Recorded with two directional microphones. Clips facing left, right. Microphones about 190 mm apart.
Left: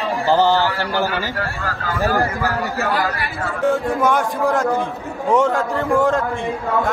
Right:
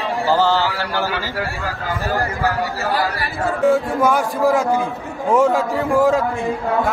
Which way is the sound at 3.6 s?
5° right (ahead or behind).